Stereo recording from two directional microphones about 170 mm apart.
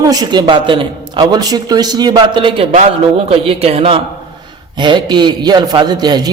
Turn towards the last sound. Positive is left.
turn(degrees=-25)  # may be behind; listen again after turning